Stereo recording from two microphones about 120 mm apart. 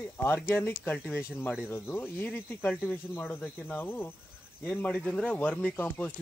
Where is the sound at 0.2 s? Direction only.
20° left (ahead or behind).